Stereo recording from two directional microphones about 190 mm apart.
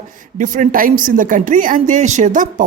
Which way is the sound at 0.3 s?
45° right (ahead or behind).